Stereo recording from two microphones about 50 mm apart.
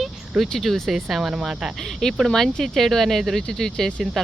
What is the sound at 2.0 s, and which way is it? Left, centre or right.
Speech, centre.